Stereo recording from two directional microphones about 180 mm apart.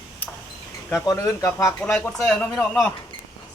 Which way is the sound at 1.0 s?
20° left (ahead or behind).